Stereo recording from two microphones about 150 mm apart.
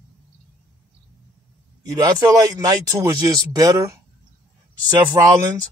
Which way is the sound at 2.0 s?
25° right (ahead or behind).